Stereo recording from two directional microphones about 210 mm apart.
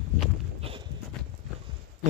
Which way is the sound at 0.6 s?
25° right (ahead or behind).